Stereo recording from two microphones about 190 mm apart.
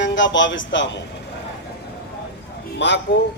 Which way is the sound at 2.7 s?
65° left (ahead or behind).